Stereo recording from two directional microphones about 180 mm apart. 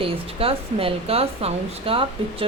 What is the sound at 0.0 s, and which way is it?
A woman's voice, 30° right (ahead or behind).